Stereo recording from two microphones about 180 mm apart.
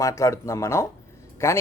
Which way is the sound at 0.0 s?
15° left (ahead or behind).